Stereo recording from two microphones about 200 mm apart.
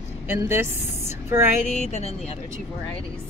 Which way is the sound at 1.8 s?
35° left (ahead or behind).